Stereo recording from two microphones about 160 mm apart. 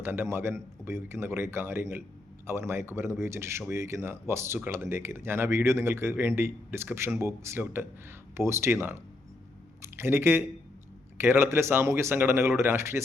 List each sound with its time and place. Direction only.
0.0 s speech: 15° right (ahead or behind)